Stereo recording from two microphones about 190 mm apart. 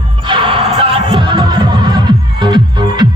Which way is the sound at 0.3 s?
25° right (ahead or behind).